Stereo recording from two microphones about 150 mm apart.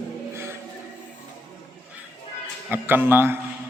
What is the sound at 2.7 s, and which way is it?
Speech, 15° right (ahead or behind).